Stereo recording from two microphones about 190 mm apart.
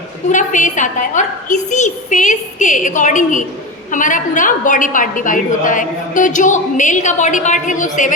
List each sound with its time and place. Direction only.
0.3 s a woman's voice: 40° left (ahead or behind)